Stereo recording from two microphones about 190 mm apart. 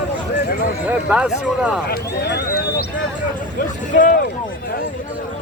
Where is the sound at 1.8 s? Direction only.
55° left (ahead or behind).